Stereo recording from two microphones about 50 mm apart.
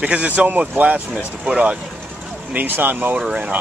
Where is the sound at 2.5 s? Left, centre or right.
Right.